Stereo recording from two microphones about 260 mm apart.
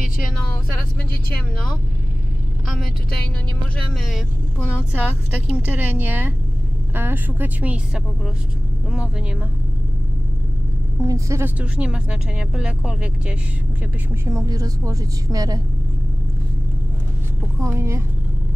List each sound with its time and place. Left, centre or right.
3.7 s a woman's voice: centre
11.0 s a woman's voice: centre
17.6 s a woman's voice: centre